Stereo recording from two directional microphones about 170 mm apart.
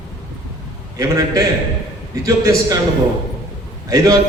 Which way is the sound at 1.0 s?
20° right (ahead or behind).